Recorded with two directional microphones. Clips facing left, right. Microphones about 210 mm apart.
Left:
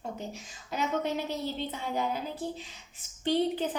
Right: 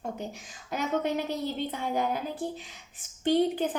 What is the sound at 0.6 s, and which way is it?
A woman's voice, 50° right (ahead or behind).